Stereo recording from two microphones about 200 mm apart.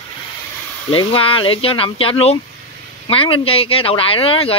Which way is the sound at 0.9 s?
25° left (ahead or behind).